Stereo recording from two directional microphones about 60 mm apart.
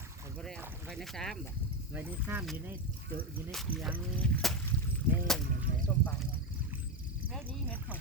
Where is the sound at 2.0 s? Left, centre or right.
Right.